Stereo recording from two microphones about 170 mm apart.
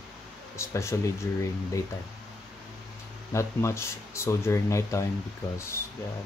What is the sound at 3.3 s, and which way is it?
Speech, 15° left (ahead or behind).